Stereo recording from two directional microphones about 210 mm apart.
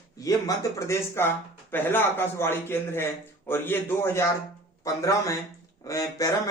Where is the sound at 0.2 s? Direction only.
15° left (ahead or behind).